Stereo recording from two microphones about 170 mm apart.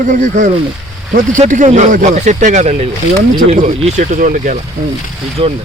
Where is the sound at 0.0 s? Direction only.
50° right (ahead or behind).